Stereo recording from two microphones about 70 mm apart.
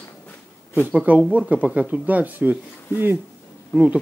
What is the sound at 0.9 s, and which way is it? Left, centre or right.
Speech, centre.